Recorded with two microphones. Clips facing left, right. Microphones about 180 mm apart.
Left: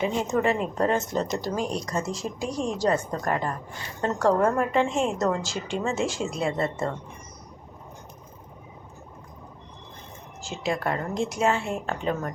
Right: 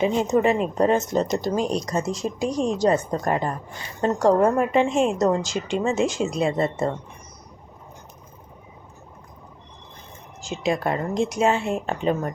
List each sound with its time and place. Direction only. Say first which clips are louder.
0.0 s a woman's voice: right 5 dB; 20° right (ahead or behind)
10.4 s speech: right 4 dB; 20° right (ahead or behind)